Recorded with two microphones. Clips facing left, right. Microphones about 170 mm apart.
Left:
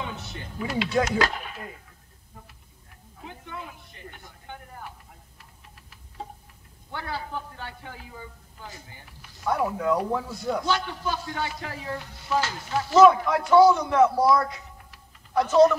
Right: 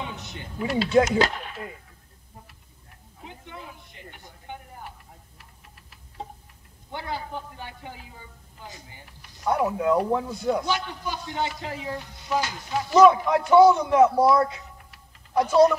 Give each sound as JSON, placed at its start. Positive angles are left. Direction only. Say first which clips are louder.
{"t": 0.2, "sound": "a sound", "louder": "right 2 dB", "side_deg": -20}
{"t": 0.8, "sound": "a man's voice", "louder": "right 5 dB", "side_deg": -25}
{"t": 6.9, "sound": "a man's voice", "louder": "right 1 dB", "side_deg": -15}
{"t": 9.5, "sound": "a man's voice", "louder": "right 2 dB", "side_deg": -15}